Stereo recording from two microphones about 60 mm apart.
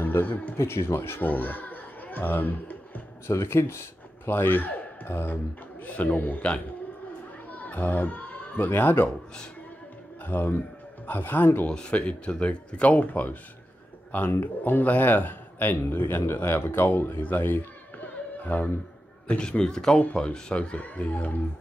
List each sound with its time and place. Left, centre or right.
0.0 s a man's voice: left
0.6 s speech: left
1.3 s speech: left
3.3 s speech: left
7.5 s speech: left
10.2 s speech: left
11.7 s speech: centre; by 17.6 s left
18.0 s music: left
19.2 s a man's voice: centre